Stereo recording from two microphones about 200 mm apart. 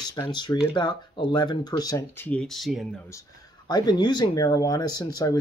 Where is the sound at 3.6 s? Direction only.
20° left (ahead or behind).